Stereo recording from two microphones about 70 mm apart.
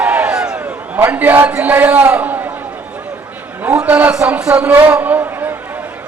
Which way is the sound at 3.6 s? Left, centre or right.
Right.